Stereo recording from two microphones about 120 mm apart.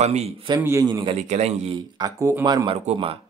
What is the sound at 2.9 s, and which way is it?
Speech, 75° right (ahead or behind).